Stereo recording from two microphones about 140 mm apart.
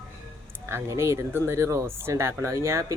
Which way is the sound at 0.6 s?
20° right (ahead or behind).